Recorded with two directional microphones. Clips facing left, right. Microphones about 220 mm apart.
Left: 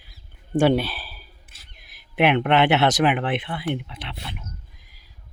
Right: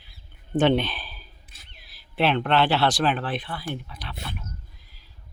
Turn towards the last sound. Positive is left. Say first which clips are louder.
# left 1 dB
turn(degrees=25)  # may be behind; listen again after turning